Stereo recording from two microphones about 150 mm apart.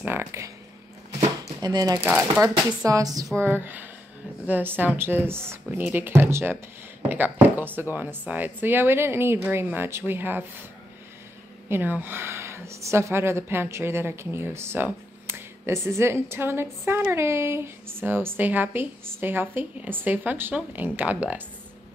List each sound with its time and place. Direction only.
0.0 s a woman's voice: 15° right (ahead or behind)
1.4 s a sound: 25° right (ahead or behind)
2.3 s a woman's voice: 20° right (ahead or behind)
11.7 s a woman's voice: 15° right (ahead or behind)